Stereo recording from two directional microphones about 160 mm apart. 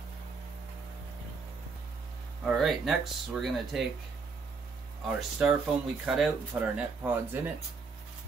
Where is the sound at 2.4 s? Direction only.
Centre (ahead or behind).